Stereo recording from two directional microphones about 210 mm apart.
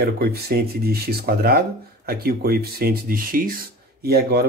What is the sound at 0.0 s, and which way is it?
Speech, 45° right (ahead or behind).